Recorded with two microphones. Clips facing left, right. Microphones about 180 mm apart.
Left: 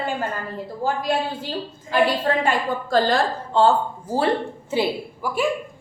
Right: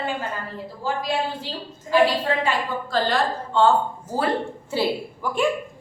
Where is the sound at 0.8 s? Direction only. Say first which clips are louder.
Left 2 dB; 50° left (ahead or behind).